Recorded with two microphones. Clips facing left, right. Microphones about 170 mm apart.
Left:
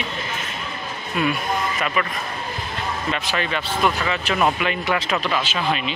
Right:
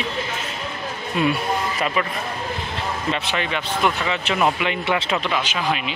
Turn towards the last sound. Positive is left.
turn(degrees=-15)  # may be behind; listen again after turning